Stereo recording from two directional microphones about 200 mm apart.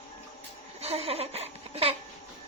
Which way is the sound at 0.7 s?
30° right (ahead or behind).